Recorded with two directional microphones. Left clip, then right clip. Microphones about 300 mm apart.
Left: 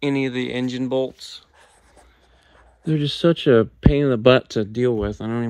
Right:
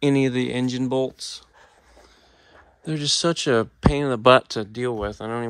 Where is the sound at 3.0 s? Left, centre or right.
Right.